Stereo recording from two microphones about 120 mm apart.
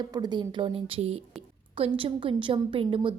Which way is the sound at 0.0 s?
35° right (ahead or behind).